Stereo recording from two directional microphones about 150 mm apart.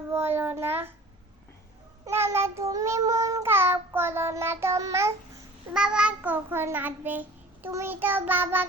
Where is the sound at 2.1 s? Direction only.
15° right (ahead or behind).